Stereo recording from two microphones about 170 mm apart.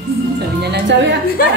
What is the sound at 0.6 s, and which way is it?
Speech, 75° right (ahead or behind).